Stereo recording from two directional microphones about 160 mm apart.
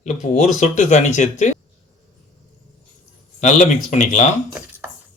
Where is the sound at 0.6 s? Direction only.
45° left (ahead or behind).